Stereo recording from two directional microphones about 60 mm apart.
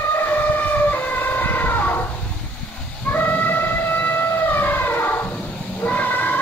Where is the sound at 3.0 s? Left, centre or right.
Left.